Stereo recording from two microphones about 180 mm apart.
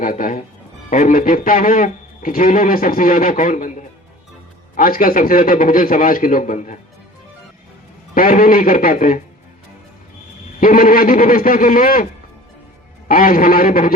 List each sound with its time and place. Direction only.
0.0 s a man's voice: 50° left (ahead or behind)
8.1 s a man's voice: 50° left (ahead or behind)
10.6 s a man's voice: 50° left (ahead or behind)
13.1 s a man's voice: 50° left (ahead or behind)